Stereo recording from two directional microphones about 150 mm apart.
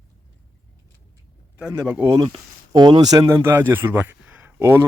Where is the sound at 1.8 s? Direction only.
15° right (ahead or behind).